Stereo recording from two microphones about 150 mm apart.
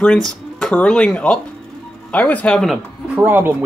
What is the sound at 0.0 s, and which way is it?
Speech, 5° left (ahead or behind).